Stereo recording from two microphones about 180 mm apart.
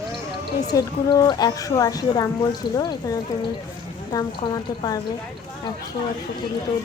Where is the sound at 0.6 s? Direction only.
20° left (ahead or behind).